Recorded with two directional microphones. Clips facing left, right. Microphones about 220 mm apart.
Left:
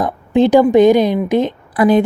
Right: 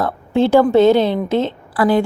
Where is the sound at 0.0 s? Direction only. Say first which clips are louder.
Left 3 dB; 15° left (ahead or behind).